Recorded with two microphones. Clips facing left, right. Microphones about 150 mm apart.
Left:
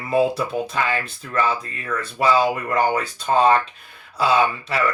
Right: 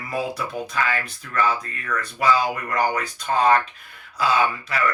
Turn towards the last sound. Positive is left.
turn(degrees=30)  # may be behind; listen again after turning